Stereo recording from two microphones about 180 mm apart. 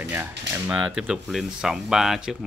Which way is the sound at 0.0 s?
10° right (ahead or behind).